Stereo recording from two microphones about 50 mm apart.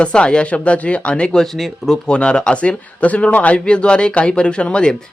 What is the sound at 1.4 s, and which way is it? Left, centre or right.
Speech, centre.